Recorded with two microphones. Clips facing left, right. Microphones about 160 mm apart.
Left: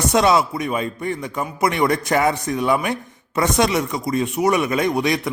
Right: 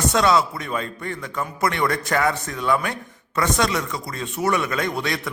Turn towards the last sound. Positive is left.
turn(degrees=20)  # may be behind; listen again after turning